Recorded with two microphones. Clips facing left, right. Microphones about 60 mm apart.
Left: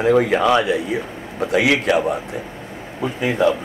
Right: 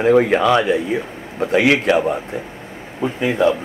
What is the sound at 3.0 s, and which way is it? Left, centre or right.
Speech, centre.